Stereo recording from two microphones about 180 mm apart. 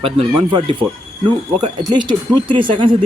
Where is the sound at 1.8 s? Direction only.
25° right (ahead or behind).